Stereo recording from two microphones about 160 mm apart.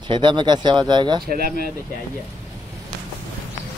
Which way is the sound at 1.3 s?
70° right (ahead or behind).